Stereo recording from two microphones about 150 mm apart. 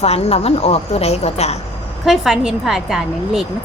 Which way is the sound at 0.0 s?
45° left (ahead or behind).